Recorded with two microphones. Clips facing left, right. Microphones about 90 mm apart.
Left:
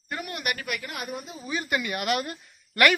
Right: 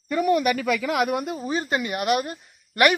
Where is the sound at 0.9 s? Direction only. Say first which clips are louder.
Right 12 dB; 70° right (ahead or behind).